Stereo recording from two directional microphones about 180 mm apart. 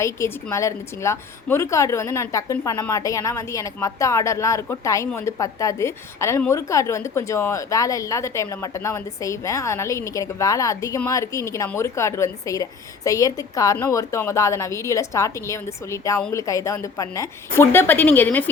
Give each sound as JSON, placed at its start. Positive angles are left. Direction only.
{"t": 0.0, "sound": "a woman's voice", "side_deg": 15}